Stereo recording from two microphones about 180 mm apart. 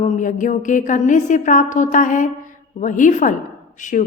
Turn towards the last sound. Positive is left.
turn(degrees=45)  # may be behind; listen again after turning